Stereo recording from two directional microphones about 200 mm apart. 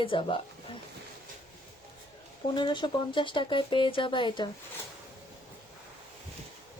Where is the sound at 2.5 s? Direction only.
25° left (ahead or behind).